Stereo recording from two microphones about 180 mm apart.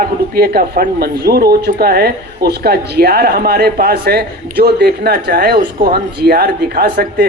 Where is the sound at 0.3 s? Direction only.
60° right (ahead or behind).